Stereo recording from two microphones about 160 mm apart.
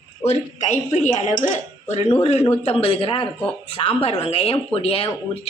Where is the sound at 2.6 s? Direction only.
40° left (ahead or behind).